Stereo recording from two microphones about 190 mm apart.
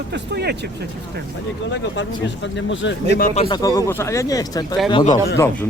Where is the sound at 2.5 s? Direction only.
75° left (ahead or behind).